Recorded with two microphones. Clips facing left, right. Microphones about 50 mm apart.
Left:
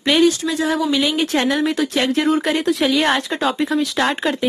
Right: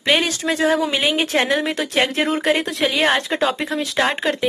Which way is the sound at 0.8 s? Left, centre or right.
Right.